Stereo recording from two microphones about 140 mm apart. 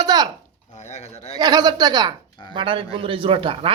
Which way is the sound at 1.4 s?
30° right (ahead or behind).